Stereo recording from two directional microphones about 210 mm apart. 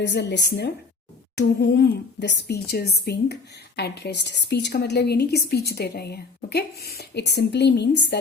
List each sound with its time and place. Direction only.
0.0 s a woman's voice: 55° left (ahead or behind)